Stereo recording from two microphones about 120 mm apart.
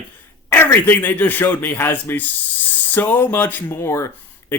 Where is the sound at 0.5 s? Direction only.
20° left (ahead or behind).